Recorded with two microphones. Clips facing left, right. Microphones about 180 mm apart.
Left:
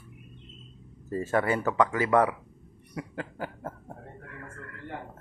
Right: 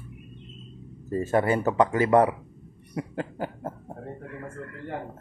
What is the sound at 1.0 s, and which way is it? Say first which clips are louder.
Speech: right 3 dB; 20° right (ahead or behind).